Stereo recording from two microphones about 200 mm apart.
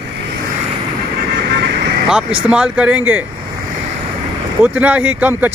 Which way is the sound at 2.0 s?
5° right (ahead or behind).